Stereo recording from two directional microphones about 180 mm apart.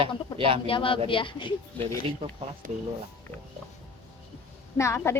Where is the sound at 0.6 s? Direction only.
30° left (ahead or behind).